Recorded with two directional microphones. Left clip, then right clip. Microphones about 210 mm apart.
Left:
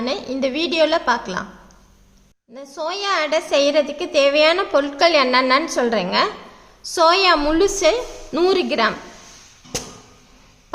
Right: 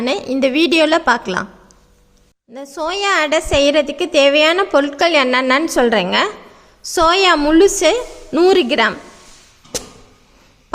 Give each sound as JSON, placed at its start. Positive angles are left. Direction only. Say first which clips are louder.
{"t": 0.0, "sound": "a woman's voice", "louder": "right 5 dB", "side_deg": -40}
{"t": 2.5, "sound": "a woman's voice", "louder": "right 4 dB", "side_deg": -35}